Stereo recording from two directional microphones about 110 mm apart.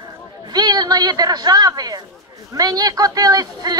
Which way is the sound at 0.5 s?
35° right (ahead or behind).